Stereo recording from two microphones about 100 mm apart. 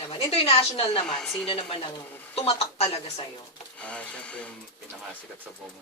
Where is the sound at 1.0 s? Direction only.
5° left (ahead or behind).